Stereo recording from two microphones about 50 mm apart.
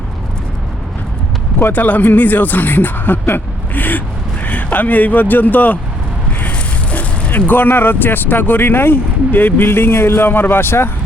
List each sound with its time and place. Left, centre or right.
1.7 s speech: left